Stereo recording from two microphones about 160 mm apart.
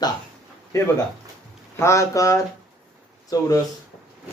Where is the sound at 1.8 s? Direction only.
20° left (ahead or behind).